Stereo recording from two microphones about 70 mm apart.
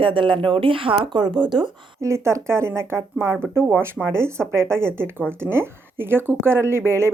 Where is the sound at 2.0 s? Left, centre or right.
Right.